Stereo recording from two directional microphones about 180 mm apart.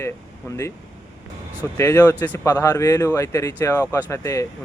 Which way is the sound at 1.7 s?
10° left (ahead or behind).